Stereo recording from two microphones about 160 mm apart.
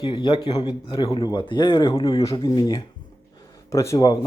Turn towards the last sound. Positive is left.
turn(degrees=20)  # may be behind; listen again after turning